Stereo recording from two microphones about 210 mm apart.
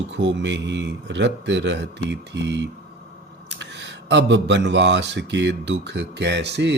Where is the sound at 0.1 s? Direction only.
55° right (ahead or behind).